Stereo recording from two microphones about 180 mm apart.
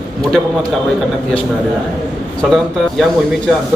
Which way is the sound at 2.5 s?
Centre (ahead or behind).